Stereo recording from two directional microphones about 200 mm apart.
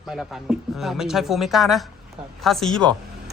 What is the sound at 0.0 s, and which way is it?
Speech, centre (ahead or behind).